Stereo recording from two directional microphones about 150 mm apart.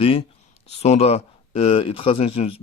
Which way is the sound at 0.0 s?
35° left (ahead or behind).